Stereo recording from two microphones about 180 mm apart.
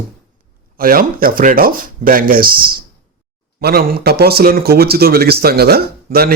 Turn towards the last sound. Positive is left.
turn(degrees=-60)  # may be behind; listen again after turning